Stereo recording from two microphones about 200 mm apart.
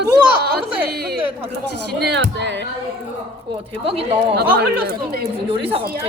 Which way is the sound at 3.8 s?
30° right (ahead or behind).